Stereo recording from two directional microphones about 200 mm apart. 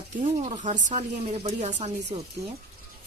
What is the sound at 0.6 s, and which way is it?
Speech, 40° right (ahead or behind).